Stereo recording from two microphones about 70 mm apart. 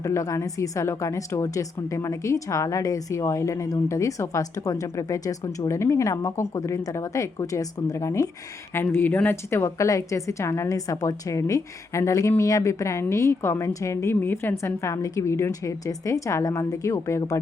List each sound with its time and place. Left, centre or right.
0.0 s a woman's voice: left
8.7 s a woman's voice: left
10.8 s a woman's voice: left
14.2 s speech: left
14.5 s a woman's voice: left